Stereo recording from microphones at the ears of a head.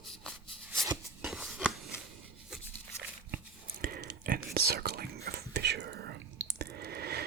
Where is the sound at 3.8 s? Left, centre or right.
Right.